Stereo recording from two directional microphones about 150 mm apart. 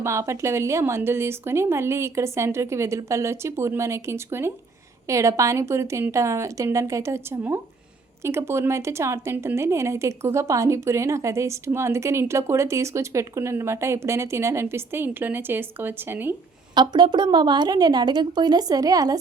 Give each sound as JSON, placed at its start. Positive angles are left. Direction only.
{"t": 0.0, "sound": "a woman's voice", "side_deg": -20}
{"t": 16.7, "sound": "a woman's voice", "side_deg": -30}